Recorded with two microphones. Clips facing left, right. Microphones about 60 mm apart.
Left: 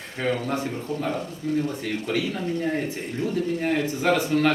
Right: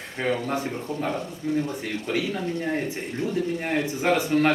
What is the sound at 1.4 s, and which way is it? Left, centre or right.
Speech, centre.